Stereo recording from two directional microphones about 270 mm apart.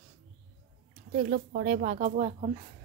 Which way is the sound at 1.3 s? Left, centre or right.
Right.